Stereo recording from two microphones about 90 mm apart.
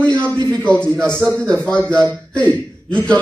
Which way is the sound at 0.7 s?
10° left (ahead or behind).